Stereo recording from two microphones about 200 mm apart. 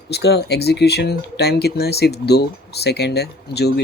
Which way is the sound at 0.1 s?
55° left (ahead or behind).